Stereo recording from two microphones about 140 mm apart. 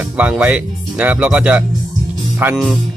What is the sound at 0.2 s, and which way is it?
Speech, 10° right (ahead or behind).